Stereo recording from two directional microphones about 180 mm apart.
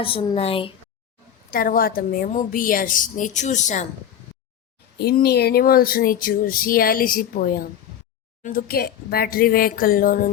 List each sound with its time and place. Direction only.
0.0 s a woman's voice: 30° left (ahead or behind)
1.5 s a woman's voice: 50° left (ahead or behind)
4.9 s a woman's voice: 60° left (ahead or behind)